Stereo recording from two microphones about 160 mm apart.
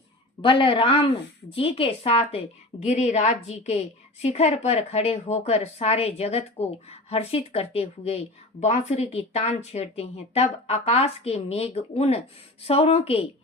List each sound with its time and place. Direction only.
0.4 s a woman's voice: 35° left (ahead or behind)